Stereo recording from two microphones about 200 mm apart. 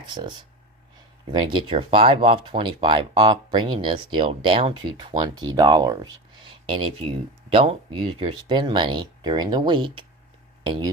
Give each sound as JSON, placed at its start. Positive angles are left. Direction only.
{"t": 0.0, "sound": "speech", "side_deg": -25}